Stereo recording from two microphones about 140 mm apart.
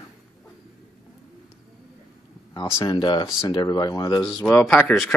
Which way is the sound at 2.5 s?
30° left (ahead or behind).